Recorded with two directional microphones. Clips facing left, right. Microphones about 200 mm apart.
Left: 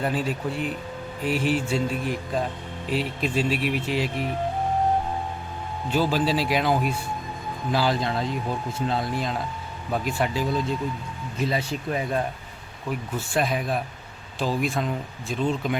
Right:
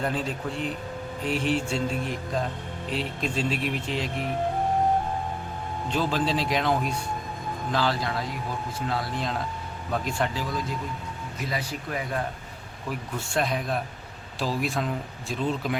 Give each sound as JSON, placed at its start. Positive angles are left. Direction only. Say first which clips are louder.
{"t": 0.0, "sound": "speech", "louder": "left 3 dB", "side_deg": 5}
{"t": 5.9, "sound": "speech", "louder": "left 3 dB", "side_deg": 5}
{"t": 7.9, "sound": "speech", "louder": "left 4 dB", "side_deg": 25}
{"t": 9.9, "sound": "speech", "louder": "left 2 dB", "side_deg": 5}
{"t": 10.4, "sound": "speech", "louder": "left 5 dB", "side_deg": 25}
{"t": 13.3, "sound": "speech", "louder": "left 2 dB", "side_deg": 5}